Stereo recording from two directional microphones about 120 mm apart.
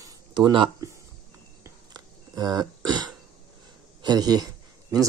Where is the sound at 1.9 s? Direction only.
35° right (ahead or behind).